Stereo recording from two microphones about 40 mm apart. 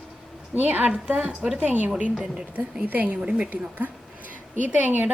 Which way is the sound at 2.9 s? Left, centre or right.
Right.